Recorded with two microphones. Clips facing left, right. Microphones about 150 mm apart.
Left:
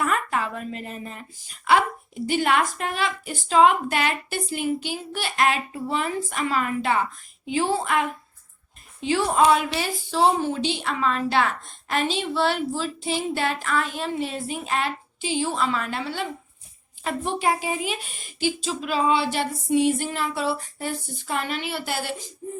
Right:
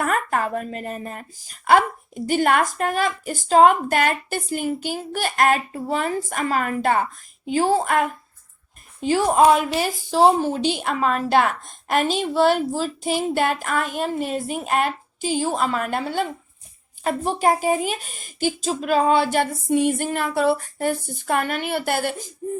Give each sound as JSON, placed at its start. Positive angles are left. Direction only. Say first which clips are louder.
{"t": 0.0, "sound": "a woman's voice", "louder": "right 3 dB", "side_deg": -50}